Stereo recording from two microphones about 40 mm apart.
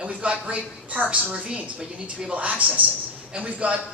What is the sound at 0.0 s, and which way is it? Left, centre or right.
A man's voice, right.